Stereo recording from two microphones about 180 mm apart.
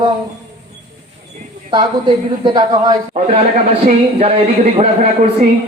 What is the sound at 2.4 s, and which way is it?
Speech, 20° right (ahead or behind).